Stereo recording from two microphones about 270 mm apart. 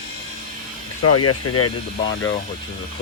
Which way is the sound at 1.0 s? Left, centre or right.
Left.